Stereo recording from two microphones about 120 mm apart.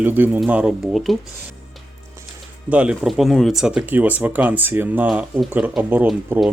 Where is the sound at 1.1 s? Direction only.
Centre (ahead or behind).